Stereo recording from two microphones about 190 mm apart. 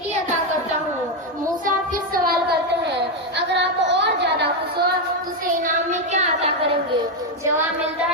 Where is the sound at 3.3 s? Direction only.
65° right (ahead or behind).